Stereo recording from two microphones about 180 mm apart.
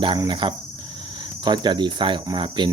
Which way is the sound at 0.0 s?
25° right (ahead or behind).